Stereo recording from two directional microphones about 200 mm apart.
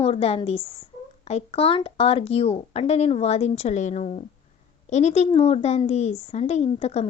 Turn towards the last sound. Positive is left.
turn(degrees=30)  # may be behind; listen again after turning